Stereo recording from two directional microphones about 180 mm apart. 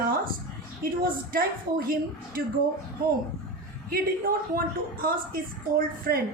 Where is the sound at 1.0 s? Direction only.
55° right (ahead or behind).